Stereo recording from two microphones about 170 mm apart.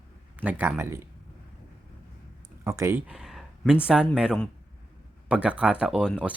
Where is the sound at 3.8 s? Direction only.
5° right (ahead or behind).